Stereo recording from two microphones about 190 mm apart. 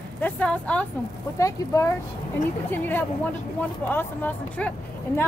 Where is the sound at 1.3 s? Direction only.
15° left (ahead or behind).